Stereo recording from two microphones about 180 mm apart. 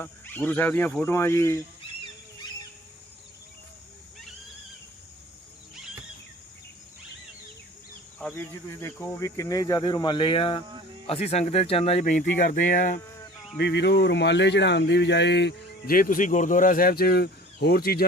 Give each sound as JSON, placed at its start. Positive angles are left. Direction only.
{"t": 0.0, "sound": "speech", "side_deg": 10}
{"t": 8.2, "sound": "speech", "side_deg": 15}
{"t": 13.6, "sound": "speech", "side_deg": 70}